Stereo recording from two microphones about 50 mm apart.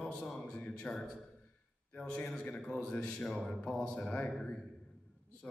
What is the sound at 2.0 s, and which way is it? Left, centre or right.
A man's voice, centre.